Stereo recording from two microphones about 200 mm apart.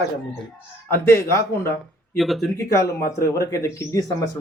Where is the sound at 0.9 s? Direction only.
15° left (ahead or behind).